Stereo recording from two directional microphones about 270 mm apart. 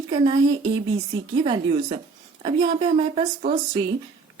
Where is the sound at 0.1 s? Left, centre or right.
Centre.